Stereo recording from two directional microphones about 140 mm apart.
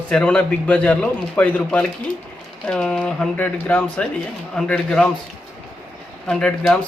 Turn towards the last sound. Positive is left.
turn(degrees=5)  # may be behind; listen again after turning